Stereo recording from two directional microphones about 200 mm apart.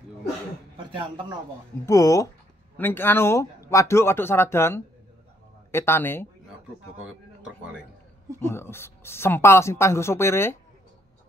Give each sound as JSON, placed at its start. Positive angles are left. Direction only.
{"t": 1.9, "sound": "speech", "side_deg": 15}
{"t": 7.0, "sound": "speech", "side_deg": -5}
{"t": 8.4, "sound": "speech", "side_deg": 10}